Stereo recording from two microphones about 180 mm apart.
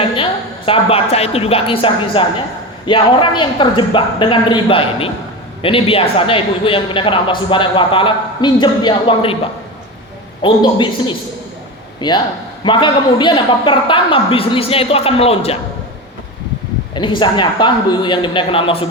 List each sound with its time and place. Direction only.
0.2 s a woman's voice: 30° left (ahead or behind)
10.4 s a man's voice: 25° left (ahead or behind)
16.9 s speech: 25° left (ahead or behind)